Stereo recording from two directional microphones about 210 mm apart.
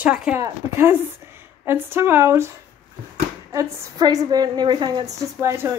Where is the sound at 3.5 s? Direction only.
15° right (ahead or behind).